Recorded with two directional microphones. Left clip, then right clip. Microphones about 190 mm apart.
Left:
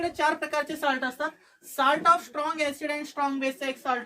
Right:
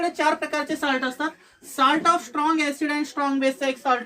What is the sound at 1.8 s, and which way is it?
Speech, 25° left (ahead or behind).